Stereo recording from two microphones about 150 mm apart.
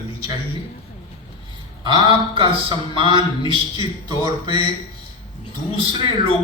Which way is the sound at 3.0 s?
35° right (ahead or behind).